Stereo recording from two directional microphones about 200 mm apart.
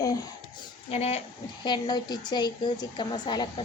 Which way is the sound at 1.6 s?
20° left (ahead or behind).